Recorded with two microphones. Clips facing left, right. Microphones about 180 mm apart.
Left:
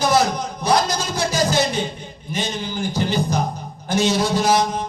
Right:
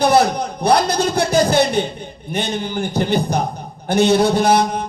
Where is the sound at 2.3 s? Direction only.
60° right (ahead or behind).